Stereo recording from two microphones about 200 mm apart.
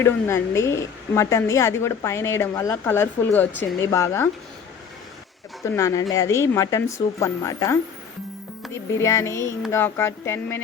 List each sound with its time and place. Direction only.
0.0 s a woman's voice: 15° left (ahead or behind)
5.6 s a woman's voice: 15° left (ahead or behind)